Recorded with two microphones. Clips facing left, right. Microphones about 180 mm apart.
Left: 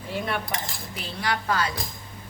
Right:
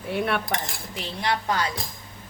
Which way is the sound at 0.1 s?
60° right (ahead or behind).